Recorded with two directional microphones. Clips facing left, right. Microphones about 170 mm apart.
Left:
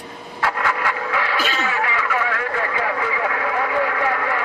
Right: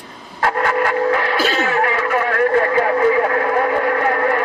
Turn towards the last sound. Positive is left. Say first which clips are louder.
# right 5 dB
turn(degrees=-45)  # may be behind; listen again after turning